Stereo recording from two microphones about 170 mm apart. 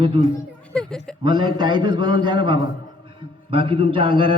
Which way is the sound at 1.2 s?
25° right (ahead or behind).